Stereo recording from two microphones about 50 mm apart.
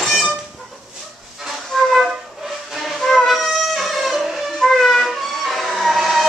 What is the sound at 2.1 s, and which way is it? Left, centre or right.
Music, centre.